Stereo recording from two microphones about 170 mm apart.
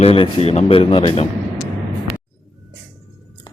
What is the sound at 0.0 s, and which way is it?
A man's voice, 35° left (ahead or behind).